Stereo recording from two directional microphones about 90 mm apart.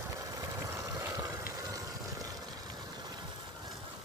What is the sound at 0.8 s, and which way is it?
Vehicle, 35° right (ahead or behind).